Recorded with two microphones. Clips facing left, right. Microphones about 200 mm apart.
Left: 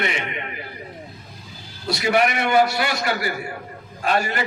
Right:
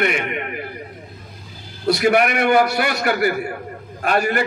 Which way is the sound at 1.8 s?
60° right (ahead or behind).